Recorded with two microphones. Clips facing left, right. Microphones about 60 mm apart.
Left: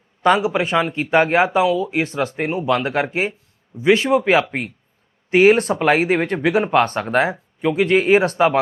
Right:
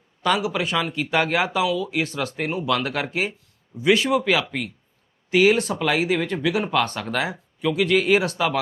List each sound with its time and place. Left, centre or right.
0.2 s speech: left